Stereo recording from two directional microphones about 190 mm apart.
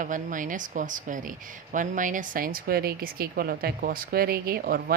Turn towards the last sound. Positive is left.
turn(degrees=-50)  # may be behind; listen again after turning